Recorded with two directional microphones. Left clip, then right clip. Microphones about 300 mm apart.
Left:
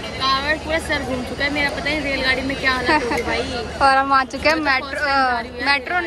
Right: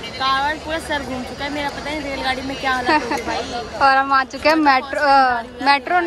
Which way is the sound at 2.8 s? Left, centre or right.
Centre.